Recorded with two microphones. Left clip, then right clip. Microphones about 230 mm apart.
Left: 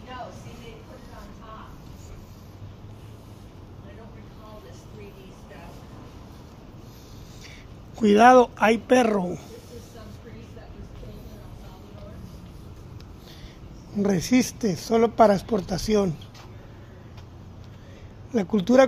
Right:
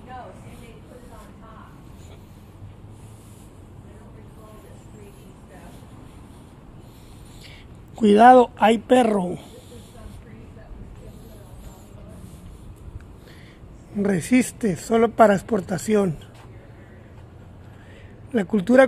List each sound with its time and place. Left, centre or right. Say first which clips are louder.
8.0 s speech: right 3 dB; centre
13.9 s speech: right 2 dB; centre
18.3 s speech: right 2 dB; centre